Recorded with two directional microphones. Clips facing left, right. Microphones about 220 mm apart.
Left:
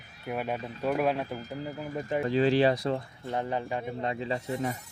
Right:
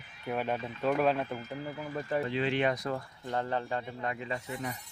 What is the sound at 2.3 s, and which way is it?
Speech, 40° left (ahead or behind).